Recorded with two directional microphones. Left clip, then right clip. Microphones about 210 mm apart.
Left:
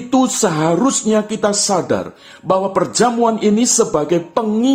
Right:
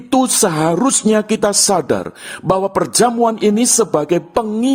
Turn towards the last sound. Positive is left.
turn(degrees=-40)  # may be behind; listen again after turning